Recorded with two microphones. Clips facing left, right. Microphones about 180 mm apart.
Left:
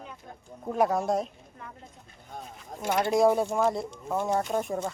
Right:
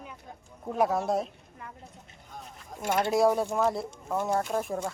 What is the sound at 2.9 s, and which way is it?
Speech, centre (ahead or behind).